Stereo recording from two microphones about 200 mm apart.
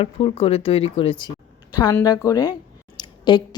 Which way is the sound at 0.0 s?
30° left (ahead or behind).